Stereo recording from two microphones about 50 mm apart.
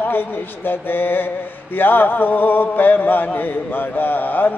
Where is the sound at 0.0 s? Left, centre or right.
Left.